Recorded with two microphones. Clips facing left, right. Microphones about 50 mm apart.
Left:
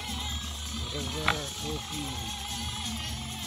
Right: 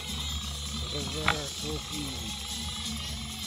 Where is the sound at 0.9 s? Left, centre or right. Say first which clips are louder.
Even; left.